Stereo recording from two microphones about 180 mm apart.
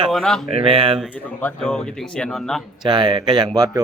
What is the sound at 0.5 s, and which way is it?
Speech, 30° right (ahead or behind).